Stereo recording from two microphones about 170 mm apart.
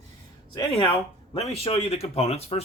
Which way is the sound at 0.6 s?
35° left (ahead or behind).